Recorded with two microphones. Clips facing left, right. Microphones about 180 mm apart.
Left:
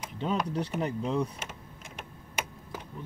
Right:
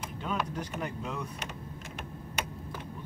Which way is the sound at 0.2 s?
30° left (ahead or behind).